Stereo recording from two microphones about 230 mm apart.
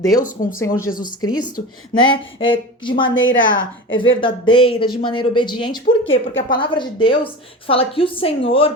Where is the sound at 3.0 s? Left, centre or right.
Left.